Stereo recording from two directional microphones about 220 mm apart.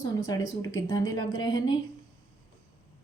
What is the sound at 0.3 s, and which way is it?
Speech, 15° left (ahead or behind).